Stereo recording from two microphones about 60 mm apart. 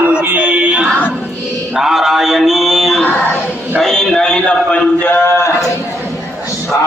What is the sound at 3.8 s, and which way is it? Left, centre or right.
A man's voice, centre.